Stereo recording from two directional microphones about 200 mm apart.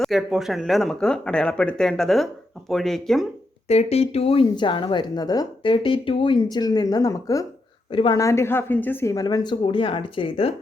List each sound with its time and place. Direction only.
0.0 s speech: centre (ahead or behind)
3.7 s speech: 30° left (ahead or behind)